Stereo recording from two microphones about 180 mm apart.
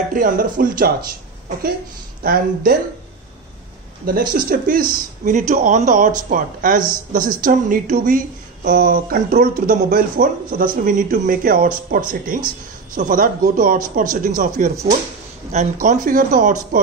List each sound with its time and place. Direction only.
0.1 s speech: 50° right (ahead or behind)
2.2 s speech: 55° right (ahead or behind)
4.0 s speech: 55° right (ahead or behind)
15.5 s speech: 40° right (ahead or behind)